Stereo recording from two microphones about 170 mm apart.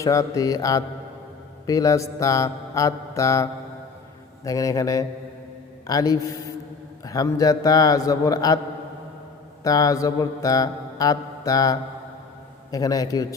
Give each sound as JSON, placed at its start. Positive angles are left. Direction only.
{"t": 0.0, "sound": "mantra", "side_deg": 20}
{"t": 9.6, "sound": "mantra", "side_deg": 20}